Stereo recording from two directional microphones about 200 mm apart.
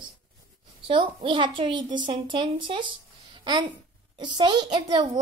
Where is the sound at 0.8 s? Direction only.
25° right (ahead or behind).